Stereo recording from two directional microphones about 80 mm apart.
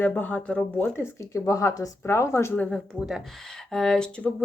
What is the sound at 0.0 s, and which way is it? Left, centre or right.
Speech, centre.